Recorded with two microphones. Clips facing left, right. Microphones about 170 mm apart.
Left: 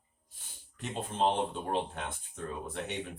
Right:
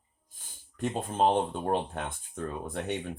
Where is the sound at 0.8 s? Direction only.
45° right (ahead or behind).